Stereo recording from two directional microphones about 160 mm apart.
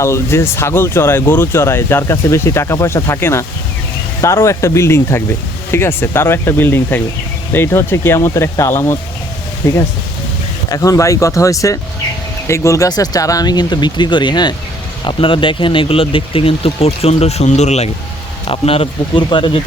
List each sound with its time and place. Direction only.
0.0 s speech: 15° left (ahead or behind)